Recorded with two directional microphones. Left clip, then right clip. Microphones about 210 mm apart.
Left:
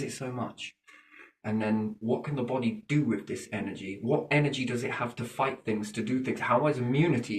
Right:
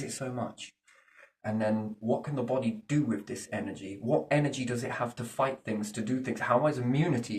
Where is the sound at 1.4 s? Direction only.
15° right (ahead or behind).